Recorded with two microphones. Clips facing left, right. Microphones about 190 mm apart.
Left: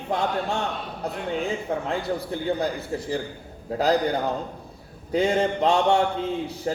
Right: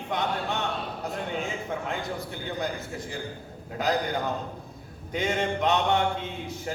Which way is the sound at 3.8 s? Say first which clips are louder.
Left 5 dB; 35° left (ahead or behind).